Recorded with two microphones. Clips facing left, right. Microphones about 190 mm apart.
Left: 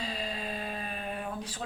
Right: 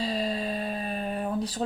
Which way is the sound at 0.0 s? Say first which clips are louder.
Right 8 dB; 35° right (ahead or behind).